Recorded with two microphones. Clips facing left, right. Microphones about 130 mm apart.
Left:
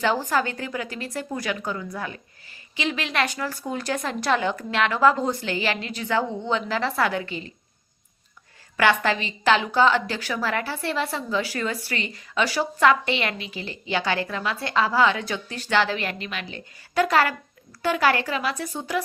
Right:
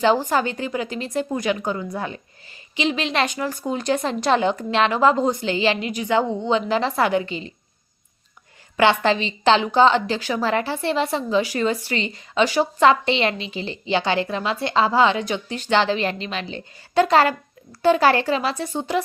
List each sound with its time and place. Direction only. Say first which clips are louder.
0.0 s a woman's voice: right 4 dB; 20° right (ahead or behind)
8.8 s a woman's voice: right 4 dB; 25° right (ahead or behind)